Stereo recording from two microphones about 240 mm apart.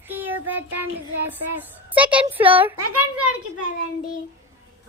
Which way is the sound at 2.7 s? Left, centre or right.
Right.